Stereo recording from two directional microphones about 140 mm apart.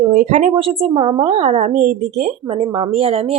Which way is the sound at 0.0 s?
55° right (ahead or behind).